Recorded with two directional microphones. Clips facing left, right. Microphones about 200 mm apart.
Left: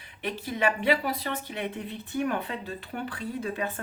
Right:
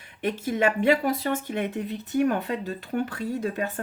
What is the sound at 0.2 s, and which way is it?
Speech, 45° right (ahead or behind).